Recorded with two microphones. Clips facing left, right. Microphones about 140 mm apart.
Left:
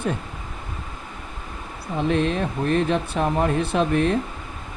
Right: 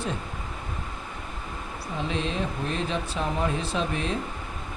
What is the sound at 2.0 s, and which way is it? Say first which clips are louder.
Speech: left 8 dB; 55° left (ahead or behind).